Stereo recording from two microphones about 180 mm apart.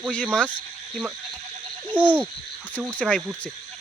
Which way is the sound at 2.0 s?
10° left (ahead or behind).